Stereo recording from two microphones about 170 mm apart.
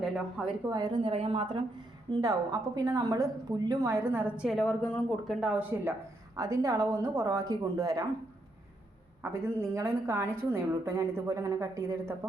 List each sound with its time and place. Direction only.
0.0 s speech: 5° right (ahead or behind)
0.6 s a woman's voice: 20° right (ahead or behind)
2.2 s a woman's voice: 20° right (ahead or behind); by 5.4 s 5° left (ahead or behind)
5.4 s a woman's voice: 5° right (ahead or behind)
6.3 s a woman's voice: 15° right (ahead or behind)
9.2 s a woman's voice: 15° right (ahead or behind)